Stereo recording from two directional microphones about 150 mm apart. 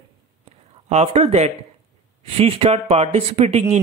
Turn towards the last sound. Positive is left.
turn(degrees=-45)  # may be behind; listen again after turning